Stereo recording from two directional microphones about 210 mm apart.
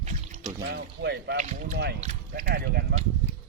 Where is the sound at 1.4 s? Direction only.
35° right (ahead or behind).